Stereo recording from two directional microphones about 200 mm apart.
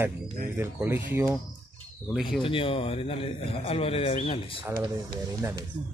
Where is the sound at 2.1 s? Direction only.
Centre (ahead or behind).